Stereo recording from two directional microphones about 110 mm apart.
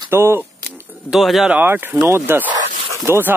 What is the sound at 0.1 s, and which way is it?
Speech, 25° right (ahead or behind).